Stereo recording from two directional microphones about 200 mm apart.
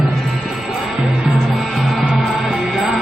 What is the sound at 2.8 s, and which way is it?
Music, centre (ahead or behind).